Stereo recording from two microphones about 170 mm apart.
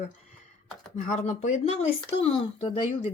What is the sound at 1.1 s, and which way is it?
Speech, 45° left (ahead or behind).